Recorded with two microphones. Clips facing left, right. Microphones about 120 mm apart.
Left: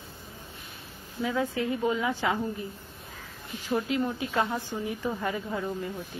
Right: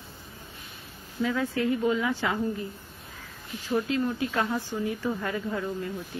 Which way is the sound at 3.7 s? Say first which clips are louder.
Right 1 dB; 15° left (ahead or behind).